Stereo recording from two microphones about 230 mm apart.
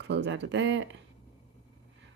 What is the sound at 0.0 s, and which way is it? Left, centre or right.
Speech, right.